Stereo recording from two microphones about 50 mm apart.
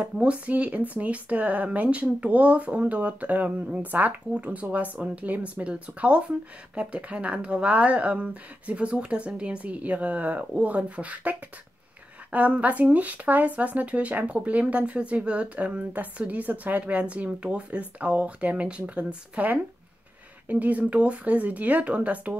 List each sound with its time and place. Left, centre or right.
0.5 s speech: right
20.4 s speech: right